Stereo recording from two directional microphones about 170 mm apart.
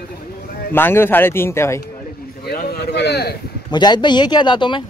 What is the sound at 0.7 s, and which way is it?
A man's voice, 15° left (ahead or behind).